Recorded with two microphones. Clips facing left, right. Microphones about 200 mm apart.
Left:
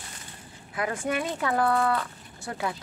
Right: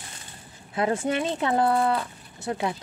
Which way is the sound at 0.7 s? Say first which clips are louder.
Right 4 dB; 25° right (ahead or behind).